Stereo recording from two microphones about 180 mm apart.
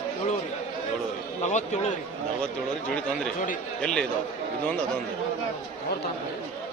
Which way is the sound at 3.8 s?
5° left (ahead or behind).